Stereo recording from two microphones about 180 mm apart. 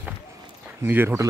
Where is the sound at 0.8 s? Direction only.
10° right (ahead or behind).